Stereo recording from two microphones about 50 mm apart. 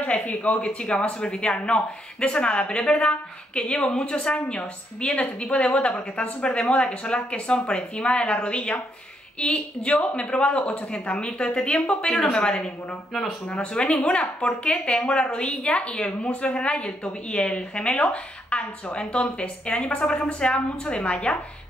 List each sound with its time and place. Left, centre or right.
0.0 s a woman's voice: left